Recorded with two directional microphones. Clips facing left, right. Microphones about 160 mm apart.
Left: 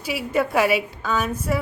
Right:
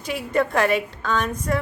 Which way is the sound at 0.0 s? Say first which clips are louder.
Even; 5° left (ahead or behind).